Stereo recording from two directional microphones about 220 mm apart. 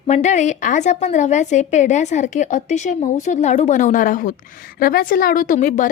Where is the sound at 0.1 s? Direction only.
30° left (ahead or behind).